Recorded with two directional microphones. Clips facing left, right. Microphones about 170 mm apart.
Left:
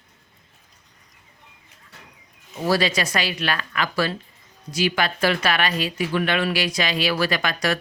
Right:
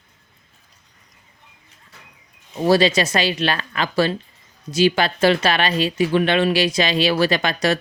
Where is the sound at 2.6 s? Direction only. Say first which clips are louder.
Right 5 dB; 25° right (ahead or behind).